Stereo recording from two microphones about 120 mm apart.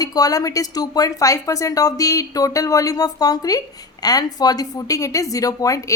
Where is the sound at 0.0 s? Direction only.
30° left (ahead or behind).